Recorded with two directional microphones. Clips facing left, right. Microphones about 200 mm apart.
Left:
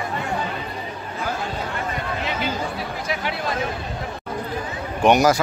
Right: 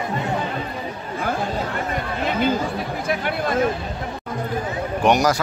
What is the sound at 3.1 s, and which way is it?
Chatter, 50° right (ahead or behind).